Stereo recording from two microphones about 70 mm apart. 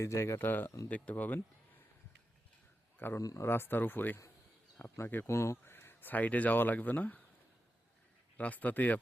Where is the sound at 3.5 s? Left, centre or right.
Left.